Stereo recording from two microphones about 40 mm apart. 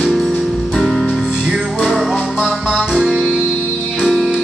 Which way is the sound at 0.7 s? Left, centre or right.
Centre.